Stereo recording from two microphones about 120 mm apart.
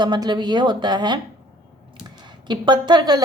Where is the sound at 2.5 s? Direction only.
40° right (ahead or behind).